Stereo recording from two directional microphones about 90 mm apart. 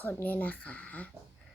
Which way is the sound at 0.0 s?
20° left (ahead or behind).